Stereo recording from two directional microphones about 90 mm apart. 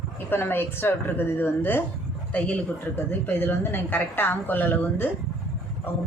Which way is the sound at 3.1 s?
25° left (ahead or behind).